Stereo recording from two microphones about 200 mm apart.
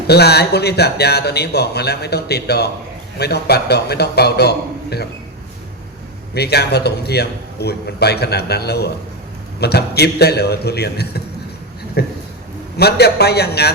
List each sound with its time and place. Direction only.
0.1 s speech: 55° left (ahead or behind)
6.3 s speech: 55° left (ahead or behind)